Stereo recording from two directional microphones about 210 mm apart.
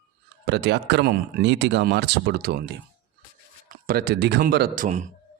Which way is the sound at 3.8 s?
45° right (ahead or behind).